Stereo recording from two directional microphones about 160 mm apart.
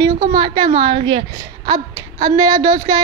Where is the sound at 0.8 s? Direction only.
35° right (ahead or behind).